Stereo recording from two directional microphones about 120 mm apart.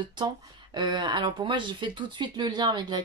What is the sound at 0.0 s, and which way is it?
Speech, 40° right (ahead or behind).